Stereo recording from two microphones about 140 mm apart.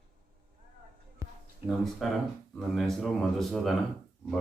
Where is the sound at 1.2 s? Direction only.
20° right (ahead or behind).